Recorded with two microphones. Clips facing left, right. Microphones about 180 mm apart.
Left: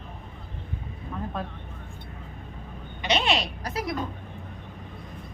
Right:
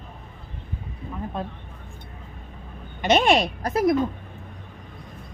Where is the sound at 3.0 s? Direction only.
50° right (ahead or behind).